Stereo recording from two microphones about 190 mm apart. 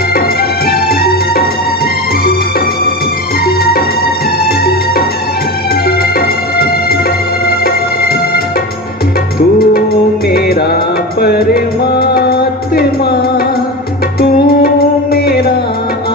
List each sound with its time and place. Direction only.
0.7 s music: 50° left (ahead or behind)
3.4 s music: 50° left (ahead or behind)
6.0 s music: 55° left (ahead or behind)
9.6 s music: 50° left (ahead or behind)
14.2 s music: 50° left (ahead or behind)